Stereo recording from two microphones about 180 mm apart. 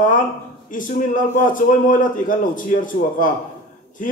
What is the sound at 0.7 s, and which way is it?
A man's voice, 45° left (ahead or behind).